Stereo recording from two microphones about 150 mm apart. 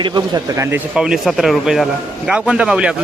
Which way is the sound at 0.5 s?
20° right (ahead or behind).